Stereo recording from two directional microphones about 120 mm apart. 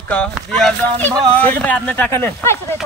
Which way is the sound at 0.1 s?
5° left (ahead or behind).